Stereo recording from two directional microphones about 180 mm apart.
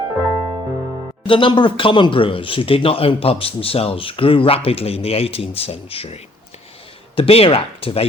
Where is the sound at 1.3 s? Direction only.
30° left (ahead or behind).